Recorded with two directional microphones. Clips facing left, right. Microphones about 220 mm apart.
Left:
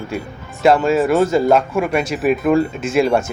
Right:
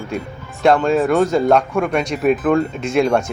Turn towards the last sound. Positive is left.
turn(degrees=5)  # may be behind; listen again after turning